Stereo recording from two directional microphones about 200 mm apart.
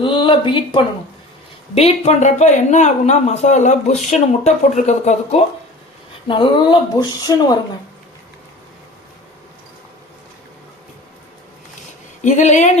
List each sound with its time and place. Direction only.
0.0 s speech: 25° left (ahead or behind)
12.2 s speech: 35° left (ahead or behind)